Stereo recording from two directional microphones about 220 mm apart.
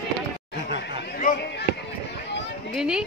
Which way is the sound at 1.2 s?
45° left (ahead or behind).